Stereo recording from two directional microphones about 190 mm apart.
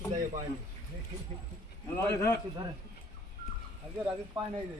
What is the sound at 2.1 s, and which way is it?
Speech, 15° left (ahead or behind).